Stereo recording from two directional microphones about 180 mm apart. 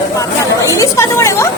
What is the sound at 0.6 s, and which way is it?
Speech, 20° left (ahead or behind).